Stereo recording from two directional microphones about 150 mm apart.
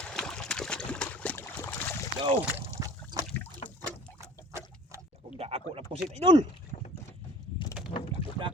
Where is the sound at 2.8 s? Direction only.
25° right (ahead or behind).